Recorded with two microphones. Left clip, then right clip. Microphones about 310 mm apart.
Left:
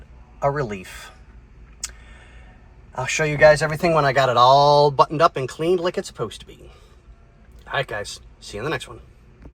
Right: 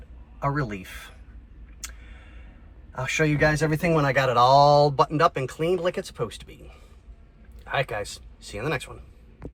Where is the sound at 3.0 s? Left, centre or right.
Centre.